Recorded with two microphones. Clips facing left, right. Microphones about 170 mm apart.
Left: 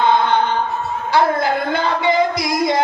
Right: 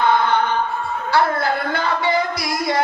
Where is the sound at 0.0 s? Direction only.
20° left (ahead or behind).